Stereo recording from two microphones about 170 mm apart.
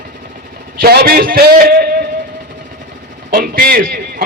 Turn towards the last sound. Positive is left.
turn(degrees=-60)  # may be behind; listen again after turning